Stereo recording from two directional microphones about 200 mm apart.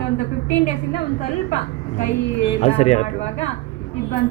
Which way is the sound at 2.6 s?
30° left (ahead or behind).